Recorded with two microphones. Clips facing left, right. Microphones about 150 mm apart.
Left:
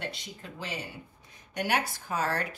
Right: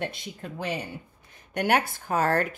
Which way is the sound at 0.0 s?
50° right (ahead or behind).